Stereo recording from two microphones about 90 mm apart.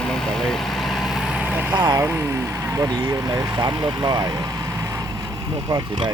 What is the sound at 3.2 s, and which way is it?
Speech, 50° right (ahead or behind).